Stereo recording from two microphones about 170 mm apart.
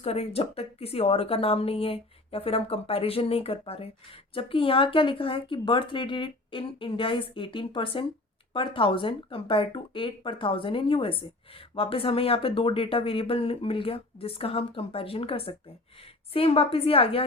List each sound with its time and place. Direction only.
0.0 s speech: 35° left (ahead or behind)